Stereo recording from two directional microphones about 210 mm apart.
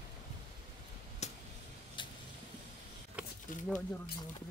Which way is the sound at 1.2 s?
30° left (ahead or behind).